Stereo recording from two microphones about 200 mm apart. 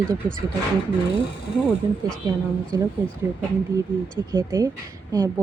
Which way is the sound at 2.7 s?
15° right (ahead or behind).